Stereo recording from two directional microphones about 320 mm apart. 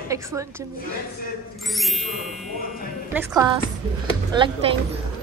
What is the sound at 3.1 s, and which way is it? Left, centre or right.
A woman's voice, centre.